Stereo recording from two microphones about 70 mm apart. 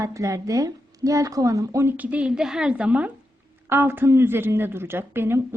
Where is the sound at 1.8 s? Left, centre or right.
Right.